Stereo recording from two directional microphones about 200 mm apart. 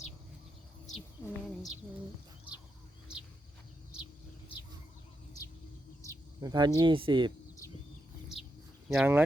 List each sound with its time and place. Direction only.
1.2 s a sound: 15° left (ahead or behind)
6.4 s speech: 20° right (ahead or behind)
8.9 s speech: 10° right (ahead or behind)